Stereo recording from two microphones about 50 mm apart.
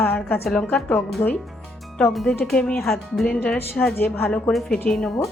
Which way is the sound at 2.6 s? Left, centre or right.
Centre.